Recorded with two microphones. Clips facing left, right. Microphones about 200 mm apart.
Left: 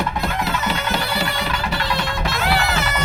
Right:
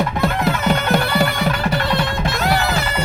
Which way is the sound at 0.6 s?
55° right (ahead or behind).